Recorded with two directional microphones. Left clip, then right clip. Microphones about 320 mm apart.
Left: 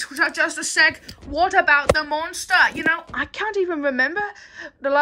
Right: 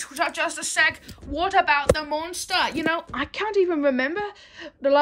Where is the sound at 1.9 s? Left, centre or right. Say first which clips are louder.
Left 3 dB; centre.